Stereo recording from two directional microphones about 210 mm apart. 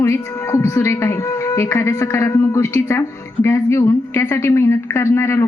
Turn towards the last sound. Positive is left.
turn(degrees=10)  # may be behind; listen again after turning